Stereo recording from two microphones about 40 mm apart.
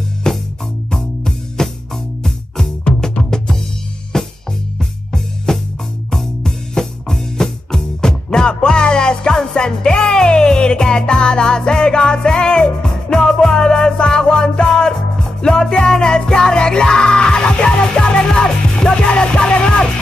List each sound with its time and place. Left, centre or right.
0.3 s music: centre